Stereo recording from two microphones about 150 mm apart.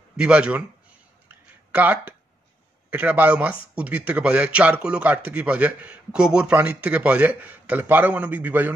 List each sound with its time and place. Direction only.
0.2 s speech: 5° right (ahead or behind)
1.3 s a sound: 10° right (ahead or behind)
2.9 s speech: 10° right (ahead or behind)